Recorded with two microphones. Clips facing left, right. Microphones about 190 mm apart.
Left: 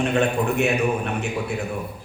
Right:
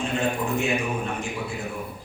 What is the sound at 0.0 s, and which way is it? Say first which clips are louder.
A man's voice: left 5 dB; 65° left (ahead or behind).